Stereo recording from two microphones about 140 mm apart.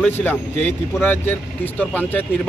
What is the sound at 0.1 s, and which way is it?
Speech, 15° left (ahead or behind).